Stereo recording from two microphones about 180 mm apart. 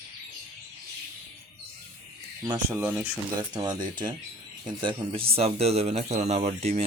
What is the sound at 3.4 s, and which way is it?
Speech, 20° right (ahead or behind).